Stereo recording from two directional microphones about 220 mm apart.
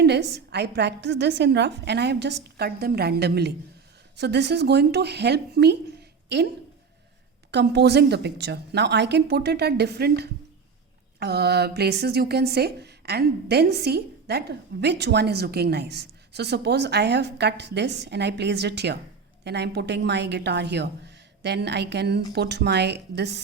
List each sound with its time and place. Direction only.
0.0 s a woman's voice: 50° right (ahead or behind)
7.5 s a woman's voice: 50° right (ahead or behind)